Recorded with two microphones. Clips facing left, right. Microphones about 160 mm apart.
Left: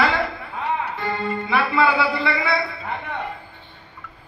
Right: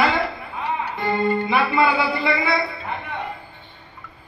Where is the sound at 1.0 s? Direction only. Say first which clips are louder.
Right 5 dB; 20° right (ahead or behind).